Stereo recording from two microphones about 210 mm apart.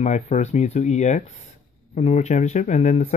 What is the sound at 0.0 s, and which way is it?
Speech, 35° left (ahead or behind).